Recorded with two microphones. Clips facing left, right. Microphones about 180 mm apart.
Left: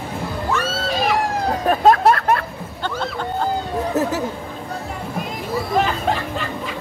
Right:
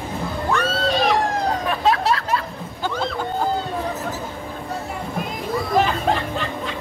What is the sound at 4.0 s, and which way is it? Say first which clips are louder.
Chatter: left 9 dB; 70° left (ahead or behind).